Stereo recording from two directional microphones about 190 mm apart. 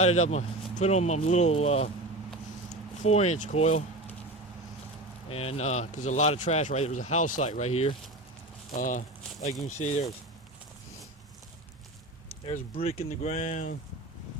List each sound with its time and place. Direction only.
0.0 s speech: 35° left (ahead or behind)
3.0 s speech: 35° left (ahead or behind)
5.3 s speech: 30° left (ahead or behind)
12.5 s speech: 30° left (ahead or behind)